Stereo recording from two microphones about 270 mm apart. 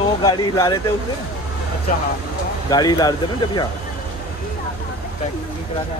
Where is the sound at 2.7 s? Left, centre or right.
Centre.